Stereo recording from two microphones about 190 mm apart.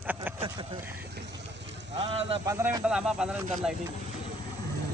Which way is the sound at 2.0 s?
30° right (ahead or behind).